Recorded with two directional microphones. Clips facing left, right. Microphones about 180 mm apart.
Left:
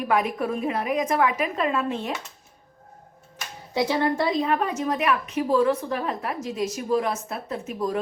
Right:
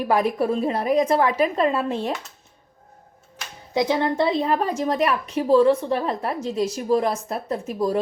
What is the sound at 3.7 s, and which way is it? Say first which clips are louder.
A woman's voice: right 2 dB; 20° right (ahead or behind).